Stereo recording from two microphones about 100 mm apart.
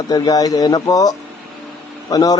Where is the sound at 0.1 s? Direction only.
40° left (ahead or behind).